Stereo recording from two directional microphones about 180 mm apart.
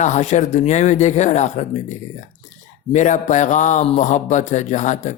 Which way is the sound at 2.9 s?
45° left (ahead or behind).